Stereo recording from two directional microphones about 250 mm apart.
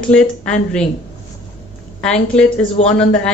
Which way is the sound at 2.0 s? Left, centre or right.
Centre.